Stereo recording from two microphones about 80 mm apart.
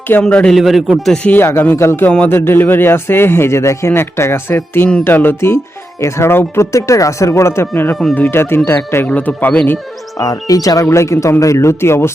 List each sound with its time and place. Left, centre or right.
0.1 s a man's voice: centre
0.5 s speech: centre
1.0 s a man's voice: centre
1.3 s speech: left
2.0 s a man's voice: centre
2.3 s speech: left
10.2 s speech: left
10.8 s speech: left